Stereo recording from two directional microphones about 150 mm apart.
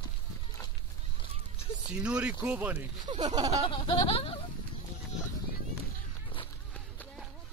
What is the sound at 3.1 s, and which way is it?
Speech, 30° right (ahead or behind).